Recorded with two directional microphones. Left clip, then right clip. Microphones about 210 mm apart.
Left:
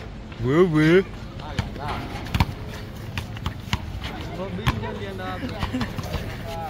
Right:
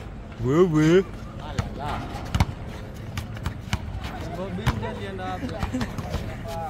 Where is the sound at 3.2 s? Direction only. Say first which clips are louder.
Left 3 dB; 35° right (ahead or behind).